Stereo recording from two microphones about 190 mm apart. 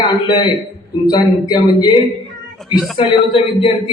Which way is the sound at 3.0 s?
30° left (ahead or behind).